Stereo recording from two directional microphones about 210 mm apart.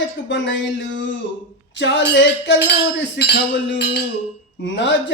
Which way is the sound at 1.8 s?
60° left (ahead or behind).